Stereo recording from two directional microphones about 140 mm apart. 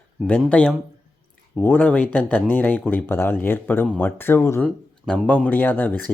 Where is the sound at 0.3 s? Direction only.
10° left (ahead or behind).